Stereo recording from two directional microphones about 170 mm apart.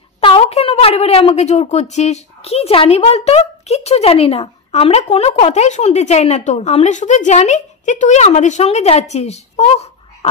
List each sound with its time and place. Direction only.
0.2 s a woman's voice: 35° left (ahead or behind)